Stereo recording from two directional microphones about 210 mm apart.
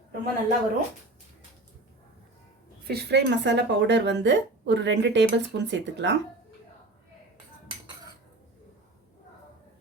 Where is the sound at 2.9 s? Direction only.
50° right (ahead or behind).